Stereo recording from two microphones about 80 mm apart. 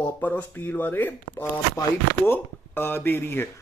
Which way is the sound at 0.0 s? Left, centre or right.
Left.